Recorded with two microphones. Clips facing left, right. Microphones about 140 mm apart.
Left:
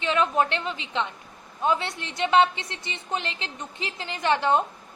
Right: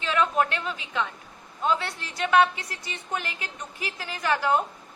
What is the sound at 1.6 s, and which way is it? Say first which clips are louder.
A woman's voice: left 1 dB; 20° left (ahead or behind).